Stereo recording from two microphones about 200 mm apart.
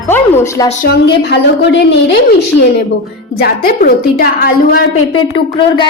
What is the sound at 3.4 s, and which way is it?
A woman's voice, 50° left (ahead or behind).